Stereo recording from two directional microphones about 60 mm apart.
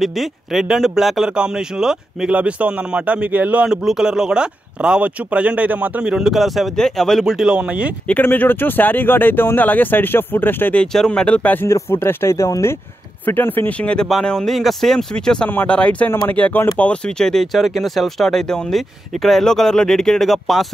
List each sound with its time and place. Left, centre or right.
0.0 s speech: centre
2.3 s a man's voice: right
3.6 s speech: centre; by 6.0 s right
6.0 s speech: centre
7.2 s speech: centre
7.5 s speech: centre
8.1 s speech: left
10.9 s speech: centre
11.2 s speech: left
11.6 s speech: left
13.2 s speech: left
13.7 s speech: centre
14.2 s speech: centre
15.4 s speech: left; by 20.6 s centre